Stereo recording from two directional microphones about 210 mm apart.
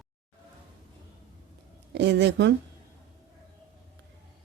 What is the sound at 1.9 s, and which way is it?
Speech, 55° right (ahead or behind).